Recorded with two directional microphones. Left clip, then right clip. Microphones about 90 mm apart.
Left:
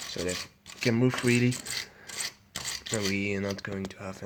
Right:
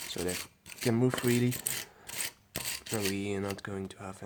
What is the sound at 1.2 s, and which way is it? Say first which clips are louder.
Speech: left 4 dB; 5° right (ahead or behind).